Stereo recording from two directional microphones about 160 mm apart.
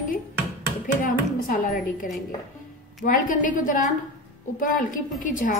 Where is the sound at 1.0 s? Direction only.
60° left (ahead or behind).